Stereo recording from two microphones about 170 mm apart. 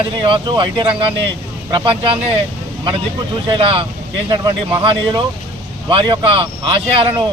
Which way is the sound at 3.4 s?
30° right (ahead or behind).